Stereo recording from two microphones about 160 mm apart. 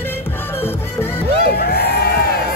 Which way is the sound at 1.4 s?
80° left.